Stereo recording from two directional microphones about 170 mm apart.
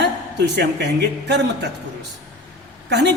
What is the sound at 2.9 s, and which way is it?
Music, 85° right.